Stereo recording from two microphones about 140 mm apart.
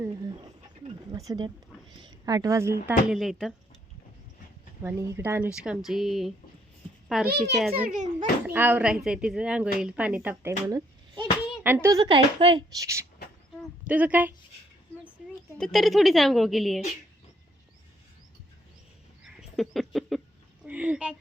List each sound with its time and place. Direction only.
0.0 s a woman's voice: 30° right (ahead or behind)
3.1 s a woman's voice: centre (ahead or behind)
4.8 s a woman's voice: 15° right (ahead or behind)
7.9 s a child's voice: 65° right (ahead or behind)
8.4 s a woman's voice: 15° right (ahead or behind)
10.7 s a sound: 30° right (ahead or behind)
11.6 s speech: 15° right (ahead or behind)
11.9 s speech: 40° right (ahead or behind)
12.7 s speech: 20° right (ahead or behind)
13.8 s a woman's voice: 10° right (ahead or behind)
15.2 s a sound: centre (ahead or behind)
15.5 s a woman's voice: centre (ahead or behind)
19.2 s a sound: centre (ahead or behind)
20.7 s speech: 10° right (ahead or behind)